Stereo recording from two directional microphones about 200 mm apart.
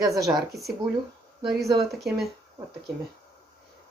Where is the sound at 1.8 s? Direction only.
Centre (ahead or behind).